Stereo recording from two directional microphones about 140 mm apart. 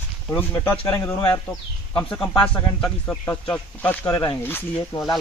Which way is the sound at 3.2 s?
15° left (ahead or behind).